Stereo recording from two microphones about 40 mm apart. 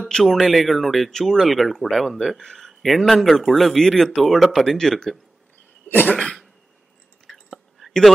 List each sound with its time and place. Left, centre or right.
0.1 s speech: centre
2.3 s speech: centre
2.8 s speech: centre
4.6 s speech: centre
6.1 s cough: centre
7.2 s chewing: centre